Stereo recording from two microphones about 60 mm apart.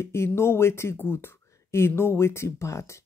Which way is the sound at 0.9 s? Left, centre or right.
Left.